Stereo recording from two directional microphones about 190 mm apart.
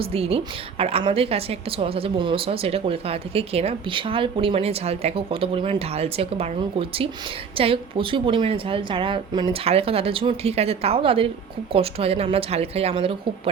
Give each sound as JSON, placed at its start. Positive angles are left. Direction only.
{"t": 0.0, "sound": "a woman's voice", "side_deg": -30}